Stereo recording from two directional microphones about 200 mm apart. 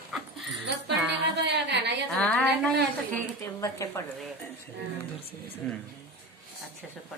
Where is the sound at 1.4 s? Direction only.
60° right (ahead or behind).